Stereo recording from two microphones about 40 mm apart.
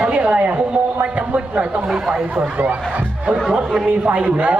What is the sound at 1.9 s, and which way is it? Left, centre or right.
Speech, centre.